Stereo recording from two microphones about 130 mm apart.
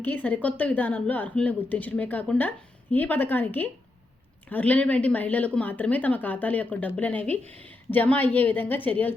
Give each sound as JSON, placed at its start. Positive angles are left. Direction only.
{"t": 0.0, "sound": "a woman's voice", "side_deg": 15}